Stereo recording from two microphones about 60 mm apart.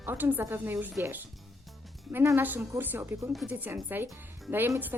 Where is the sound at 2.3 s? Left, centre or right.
Right.